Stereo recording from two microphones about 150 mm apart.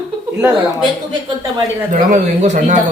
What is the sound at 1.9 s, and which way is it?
Speech, 55° right (ahead or behind).